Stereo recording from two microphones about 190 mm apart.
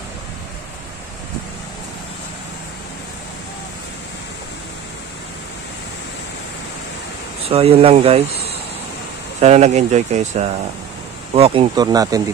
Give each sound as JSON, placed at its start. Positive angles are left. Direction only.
{"t": 7.4, "sound": "speech", "side_deg": -30}